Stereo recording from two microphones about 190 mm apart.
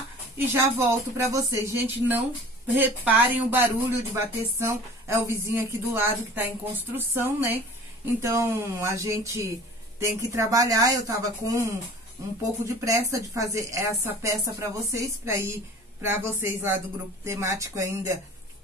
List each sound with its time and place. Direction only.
0.5 s speech: 15° right (ahead or behind)